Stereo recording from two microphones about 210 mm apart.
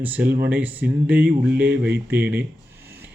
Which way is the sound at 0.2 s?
45° right (ahead or behind).